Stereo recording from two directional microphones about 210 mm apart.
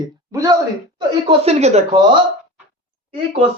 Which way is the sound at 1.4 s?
30° right (ahead or behind).